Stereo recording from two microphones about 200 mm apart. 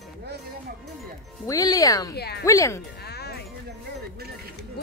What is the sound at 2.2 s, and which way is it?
Speech, 55° left (ahead or behind).